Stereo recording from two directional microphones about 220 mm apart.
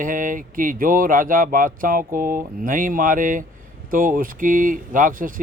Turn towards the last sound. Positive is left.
turn(degrees=-40)  # may be behind; listen again after turning